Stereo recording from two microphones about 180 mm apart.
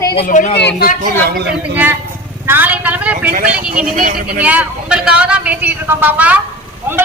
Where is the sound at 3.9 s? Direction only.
50° right (ahead or behind).